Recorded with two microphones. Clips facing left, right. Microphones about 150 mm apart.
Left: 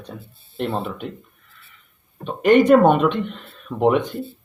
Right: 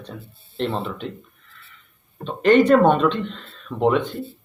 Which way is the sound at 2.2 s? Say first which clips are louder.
Left 1 dB; 10° left (ahead or behind).